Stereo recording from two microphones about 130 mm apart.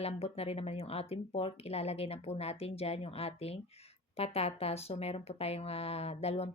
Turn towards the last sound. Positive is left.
turn(degrees=50)  # may be behind; listen again after turning